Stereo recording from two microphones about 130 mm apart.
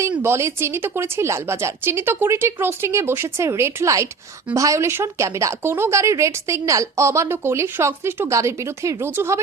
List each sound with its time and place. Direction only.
0.2 s speech: 20° right (ahead or behind)